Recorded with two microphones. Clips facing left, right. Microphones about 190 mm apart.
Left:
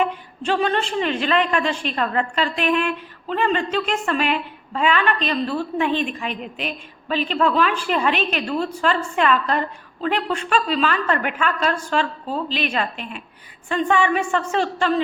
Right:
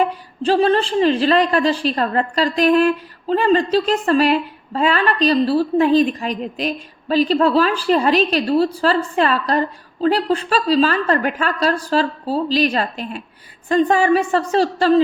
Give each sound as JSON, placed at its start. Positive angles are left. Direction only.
{"t": 0.0, "sound": "a woman's voice", "side_deg": -35}